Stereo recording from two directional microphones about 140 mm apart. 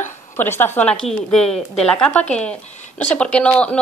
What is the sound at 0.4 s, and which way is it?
A woman's voice, 15° left (ahead or behind).